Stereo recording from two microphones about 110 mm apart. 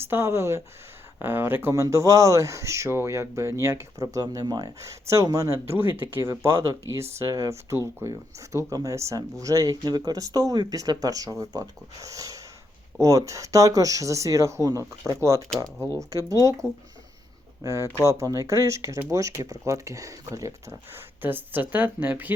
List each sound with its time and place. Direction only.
0.0 s speech: 20° right (ahead or behind)